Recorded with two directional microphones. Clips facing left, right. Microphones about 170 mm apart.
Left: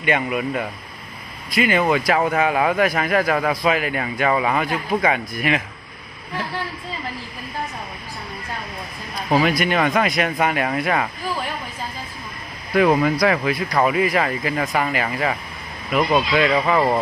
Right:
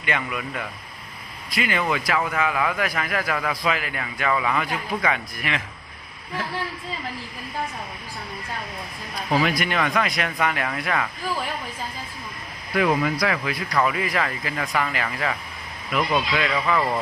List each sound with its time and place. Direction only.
0.0 s a man's voice: 20° left (ahead or behind)
1.9 s a man's voice: 35° left (ahead or behind)
9.4 s a man's voice: 20° left (ahead or behind)
12.7 s a man's voice: 35° left (ahead or behind)